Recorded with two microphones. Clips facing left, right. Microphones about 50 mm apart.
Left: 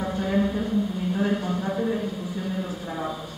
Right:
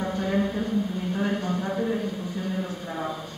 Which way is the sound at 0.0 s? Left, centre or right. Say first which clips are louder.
Left 1 dB; centre.